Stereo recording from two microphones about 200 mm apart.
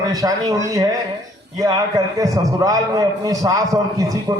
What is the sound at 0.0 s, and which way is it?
Speech, 15° right (ahead or behind).